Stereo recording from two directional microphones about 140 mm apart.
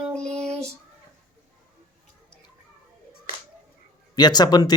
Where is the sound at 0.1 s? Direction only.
5° left (ahead or behind).